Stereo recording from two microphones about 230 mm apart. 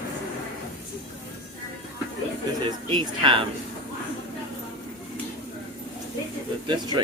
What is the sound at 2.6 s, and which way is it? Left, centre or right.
Speech, right.